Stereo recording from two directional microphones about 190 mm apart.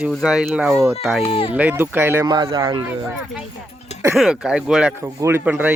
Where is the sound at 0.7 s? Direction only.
15° right (ahead or behind).